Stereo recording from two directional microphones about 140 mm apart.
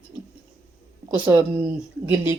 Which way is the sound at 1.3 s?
15° right (ahead or behind).